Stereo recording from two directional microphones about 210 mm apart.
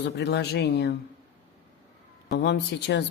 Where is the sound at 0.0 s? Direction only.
50° left (ahead or behind).